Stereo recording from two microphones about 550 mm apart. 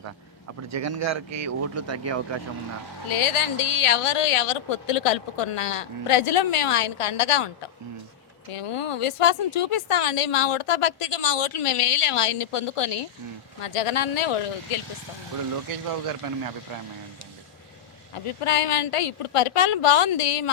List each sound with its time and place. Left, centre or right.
0.7 s speech: right
3.1 s speech: left
8.5 s speech: left
18.3 s speech: left